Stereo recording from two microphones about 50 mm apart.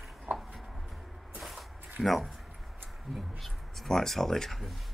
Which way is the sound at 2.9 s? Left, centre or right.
Centre.